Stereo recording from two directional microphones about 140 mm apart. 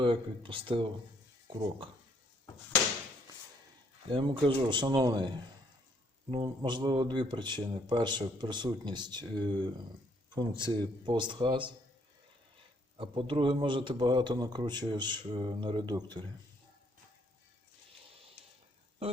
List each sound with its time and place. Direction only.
0.0 s speech: 40° right (ahead or behind)
4.1 s speech: 35° right (ahead or behind)
6.4 s speech: 30° right (ahead or behind)
13.0 s speech: 40° right (ahead or behind)